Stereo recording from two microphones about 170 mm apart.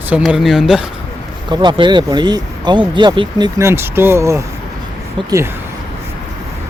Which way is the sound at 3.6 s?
15° right (ahead or behind).